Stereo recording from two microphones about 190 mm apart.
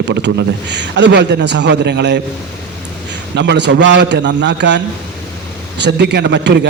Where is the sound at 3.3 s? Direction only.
65° right (ahead or behind).